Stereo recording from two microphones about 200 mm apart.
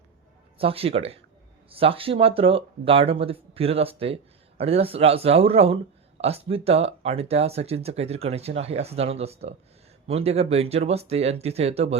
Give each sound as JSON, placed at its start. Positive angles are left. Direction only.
{"t": 0.6, "sound": "speech", "side_deg": -30}